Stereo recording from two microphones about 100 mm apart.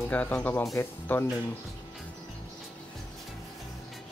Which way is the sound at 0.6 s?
30° left (ahead or behind).